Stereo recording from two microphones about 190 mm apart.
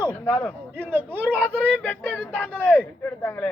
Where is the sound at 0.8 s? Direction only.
10° right (ahead or behind).